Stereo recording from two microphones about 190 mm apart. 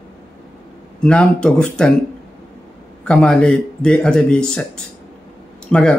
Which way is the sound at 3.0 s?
5° left (ahead or behind).